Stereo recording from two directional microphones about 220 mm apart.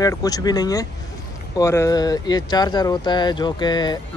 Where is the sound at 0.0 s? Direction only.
15° left (ahead or behind).